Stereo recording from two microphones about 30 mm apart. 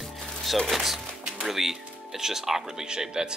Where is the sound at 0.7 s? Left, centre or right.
Centre.